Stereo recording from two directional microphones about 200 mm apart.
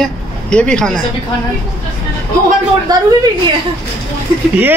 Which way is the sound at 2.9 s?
20° right (ahead or behind).